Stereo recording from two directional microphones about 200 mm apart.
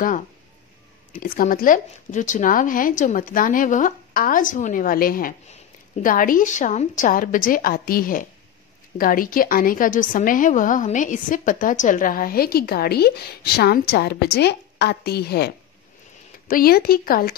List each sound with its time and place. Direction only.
1.1 s a woman's voice: 45° left (ahead or behind)